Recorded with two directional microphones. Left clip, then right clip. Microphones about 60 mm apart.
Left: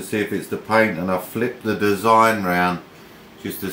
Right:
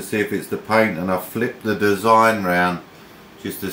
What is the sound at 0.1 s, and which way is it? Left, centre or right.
Speech, right.